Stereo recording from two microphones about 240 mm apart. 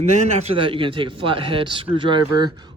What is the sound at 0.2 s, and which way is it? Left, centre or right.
A man's voice, right.